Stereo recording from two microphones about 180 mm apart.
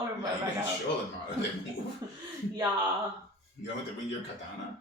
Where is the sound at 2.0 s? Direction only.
20° right (ahead or behind).